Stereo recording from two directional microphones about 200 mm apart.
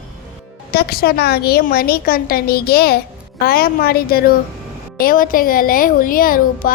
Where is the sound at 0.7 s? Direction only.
50° left (ahead or behind).